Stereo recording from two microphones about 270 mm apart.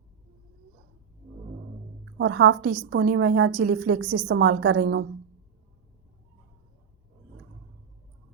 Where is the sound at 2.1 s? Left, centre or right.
Right.